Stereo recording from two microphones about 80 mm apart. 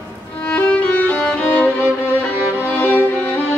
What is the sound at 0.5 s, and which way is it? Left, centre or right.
Music, centre.